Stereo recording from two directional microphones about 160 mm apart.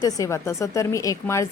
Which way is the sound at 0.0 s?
20° left (ahead or behind).